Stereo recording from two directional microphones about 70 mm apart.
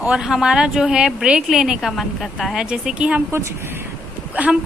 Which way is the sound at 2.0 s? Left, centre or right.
Centre.